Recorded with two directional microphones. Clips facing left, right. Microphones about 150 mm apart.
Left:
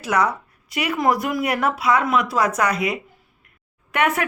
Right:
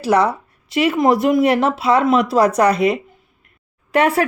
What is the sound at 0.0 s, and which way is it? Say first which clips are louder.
Speech: right 5 dB; 30° right (ahead or behind).